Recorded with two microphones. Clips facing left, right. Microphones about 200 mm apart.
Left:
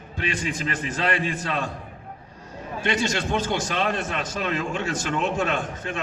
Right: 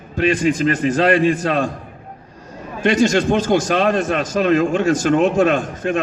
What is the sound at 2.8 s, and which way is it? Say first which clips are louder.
A man's voice: right 10 dB; 45° right (ahead or behind).